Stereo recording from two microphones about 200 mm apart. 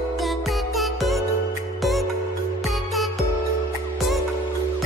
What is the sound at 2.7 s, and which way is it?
Music, centre (ahead or behind).